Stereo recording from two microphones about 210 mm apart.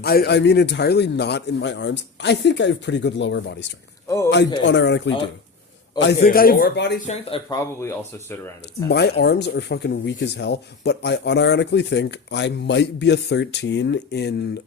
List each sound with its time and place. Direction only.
0.0 s speech: 50° left (ahead or behind)
6.2 s speech: 45° left (ahead or behind)
7.1 s speech: 25° left (ahead or behind)
7.6 s speech: 15° left (ahead or behind)
8.9 s speech: 50° left (ahead or behind)